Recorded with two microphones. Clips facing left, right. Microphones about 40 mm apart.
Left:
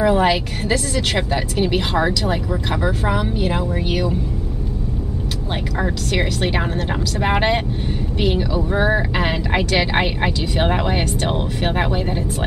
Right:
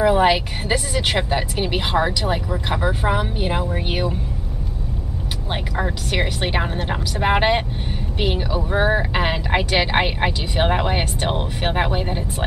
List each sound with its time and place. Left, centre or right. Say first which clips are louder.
0.0 s speech: even; centre
5.5 s speech: left 1 dB; centre